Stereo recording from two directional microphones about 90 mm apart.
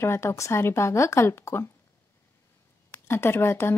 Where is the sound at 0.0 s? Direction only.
30° left (ahead or behind).